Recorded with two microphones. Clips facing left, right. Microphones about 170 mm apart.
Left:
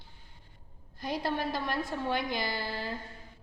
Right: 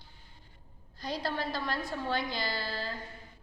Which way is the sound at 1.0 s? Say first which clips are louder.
Left 2 dB; 20° left (ahead or behind).